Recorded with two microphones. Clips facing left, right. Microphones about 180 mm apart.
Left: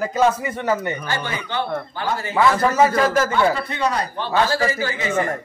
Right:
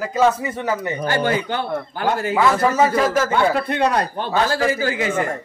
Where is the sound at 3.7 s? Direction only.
60° right (ahead or behind).